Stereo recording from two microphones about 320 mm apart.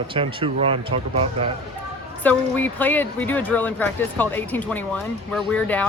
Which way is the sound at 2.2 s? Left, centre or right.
Centre.